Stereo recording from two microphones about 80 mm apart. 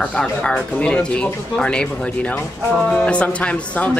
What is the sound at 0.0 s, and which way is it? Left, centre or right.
Speech, centre.